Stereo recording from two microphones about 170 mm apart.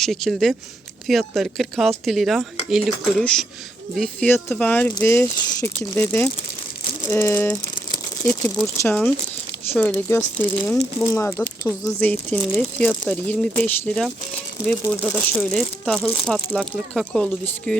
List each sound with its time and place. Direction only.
0.0 s speech: centre (ahead or behind)